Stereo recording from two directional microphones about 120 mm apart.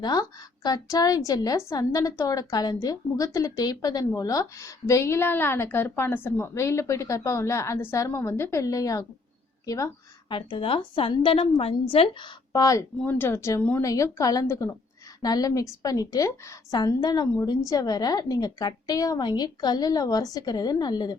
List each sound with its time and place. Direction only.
0.0 s a woman's voice: 35° left (ahead or behind)
10.2 s a woman's voice: 45° left (ahead or behind)
12.5 s speech: 30° left (ahead or behind)
13.0 s speech: 15° left (ahead or behind)
13.8 s a woman's voice: 25° left (ahead or behind)